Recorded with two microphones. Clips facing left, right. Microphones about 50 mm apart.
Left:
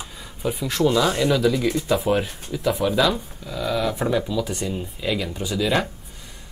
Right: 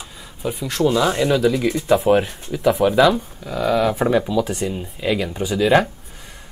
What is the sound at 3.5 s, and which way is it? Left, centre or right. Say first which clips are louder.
Speech: right 6 dB; right.